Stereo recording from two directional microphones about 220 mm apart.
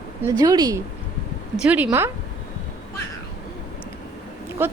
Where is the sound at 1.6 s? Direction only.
5° right (ahead or behind).